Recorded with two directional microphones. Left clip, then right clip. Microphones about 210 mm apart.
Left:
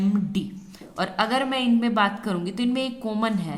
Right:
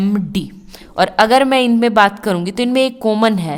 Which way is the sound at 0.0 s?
50° right (ahead or behind).